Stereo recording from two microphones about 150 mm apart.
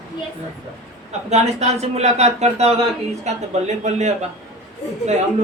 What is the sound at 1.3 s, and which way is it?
Speech, 45° right (ahead or behind).